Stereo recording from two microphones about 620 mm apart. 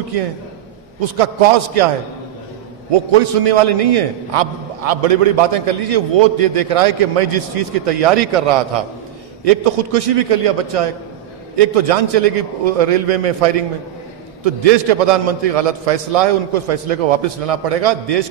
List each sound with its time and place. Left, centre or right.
1.1 s a man's voice: right
2.9 s a man's voice: right
9.4 s a man's voice: right